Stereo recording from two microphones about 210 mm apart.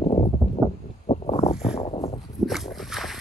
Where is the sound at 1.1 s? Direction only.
25° left (ahead or behind).